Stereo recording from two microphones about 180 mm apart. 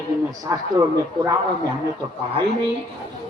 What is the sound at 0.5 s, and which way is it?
Speech, 20° right (ahead or behind).